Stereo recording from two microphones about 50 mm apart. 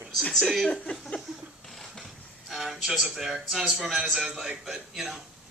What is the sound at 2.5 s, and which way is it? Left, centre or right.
A man's voice, centre.